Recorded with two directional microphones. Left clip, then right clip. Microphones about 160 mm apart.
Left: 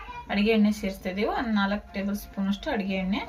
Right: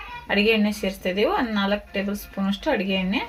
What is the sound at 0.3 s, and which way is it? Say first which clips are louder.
Speech: right 4 dB; 50° right (ahead or behind).